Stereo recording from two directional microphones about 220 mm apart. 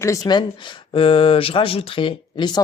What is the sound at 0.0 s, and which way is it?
Speech, 15° left (ahead or behind).